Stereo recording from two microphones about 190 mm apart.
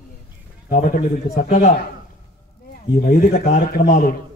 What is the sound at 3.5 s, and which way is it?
Speech, 60° left (ahead or behind).